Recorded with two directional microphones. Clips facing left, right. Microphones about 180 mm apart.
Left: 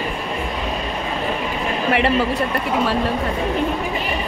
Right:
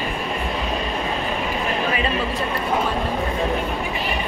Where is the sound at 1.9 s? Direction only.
70° left (ahead or behind).